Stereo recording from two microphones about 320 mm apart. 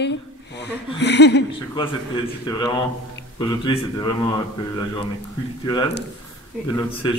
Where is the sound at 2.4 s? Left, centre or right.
Centre.